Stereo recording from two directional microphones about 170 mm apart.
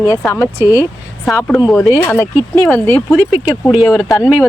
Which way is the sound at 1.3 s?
Centre (ahead or behind).